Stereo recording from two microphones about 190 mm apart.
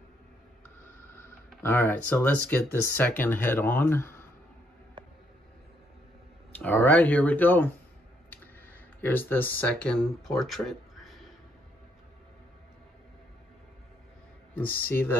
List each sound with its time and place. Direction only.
1.6 s speech: 10° left (ahead or behind)
5.0 s a sound: 25° right (ahead or behind)
6.5 s speech: 10° left (ahead or behind)
9.0 s speech: 10° left (ahead or behind)
14.5 s speech: 10° left (ahead or behind)